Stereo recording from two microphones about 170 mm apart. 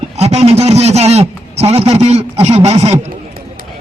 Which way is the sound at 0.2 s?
40° right (ahead or behind).